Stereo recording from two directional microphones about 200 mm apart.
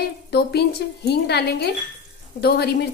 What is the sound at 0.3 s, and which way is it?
A woman's voice, 55° left (ahead or behind).